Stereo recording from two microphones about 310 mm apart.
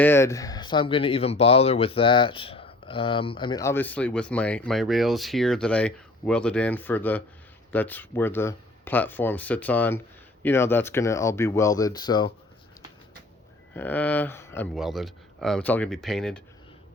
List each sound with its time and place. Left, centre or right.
0.0 s speech: centre
13.7 s speech: centre